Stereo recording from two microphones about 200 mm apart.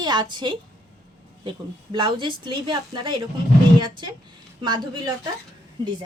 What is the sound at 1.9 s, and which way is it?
A woman's voice, 25° right (ahead or behind).